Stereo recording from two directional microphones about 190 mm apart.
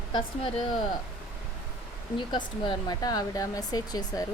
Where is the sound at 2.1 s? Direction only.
25° left (ahead or behind).